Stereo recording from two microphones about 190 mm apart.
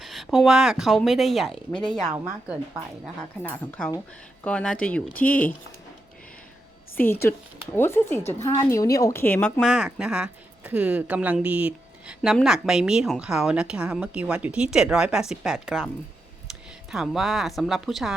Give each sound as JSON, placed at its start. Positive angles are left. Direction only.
{"t": 0.0, "sound": "speech", "side_deg": 0}
{"t": 3.4, "sound": "speech", "side_deg": 10}
{"t": 7.0, "sound": "speech", "side_deg": 10}
{"t": 9.6, "sound": "speech", "side_deg": -5}
{"t": 16.9, "sound": "speech", "side_deg": 0}